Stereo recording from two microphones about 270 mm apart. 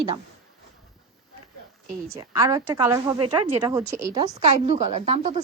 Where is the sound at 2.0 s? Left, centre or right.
Centre.